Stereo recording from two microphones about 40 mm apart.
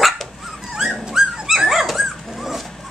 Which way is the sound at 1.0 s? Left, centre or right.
Right.